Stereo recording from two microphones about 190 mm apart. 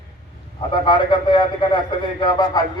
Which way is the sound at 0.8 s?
25° left (ahead or behind).